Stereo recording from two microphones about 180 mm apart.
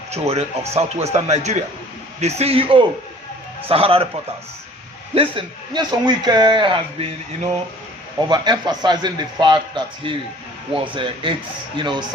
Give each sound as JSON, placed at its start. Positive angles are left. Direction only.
{"t": 0.1, "sound": "speech", "side_deg": -35}
{"t": 5.1, "sound": "a man's voice", "side_deg": -30}
{"t": 8.3, "sound": "a man's voice", "side_deg": -25}